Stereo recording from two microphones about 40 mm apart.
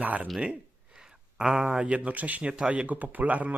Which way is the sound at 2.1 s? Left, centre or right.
Right.